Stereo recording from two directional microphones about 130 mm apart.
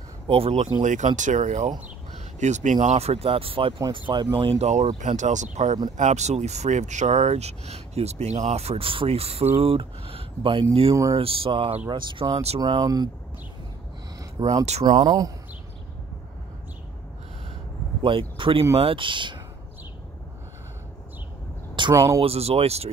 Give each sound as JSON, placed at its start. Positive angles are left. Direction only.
{"t": 0.3, "sound": "speech", "side_deg": -50}
{"t": 0.8, "sound": "speech", "side_deg": -70}
{"t": 14.6, "sound": "speech", "side_deg": -55}
{"t": 14.9, "sound": "speech", "side_deg": -30}
{"t": 18.0, "sound": "speech", "side_deg": -40}
{"t": 21.9, "sound": "speech", "side_deg": -20}
{"t": 22.2, "sound": "speech", "side_deg": -50}